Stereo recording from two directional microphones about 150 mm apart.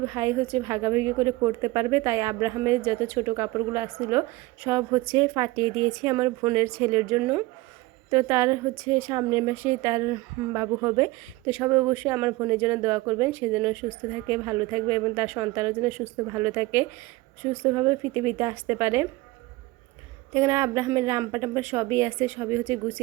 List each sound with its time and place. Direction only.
0.0 s a woman's voice: 20° right (ahead or behind)
16.2 s a woman's voice: 20° right (ahead or behind)
20.3 s a woman's voice: 15° right (ahead or behind)